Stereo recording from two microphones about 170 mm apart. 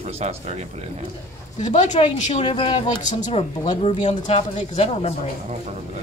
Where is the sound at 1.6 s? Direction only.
45° left (ahead or behind).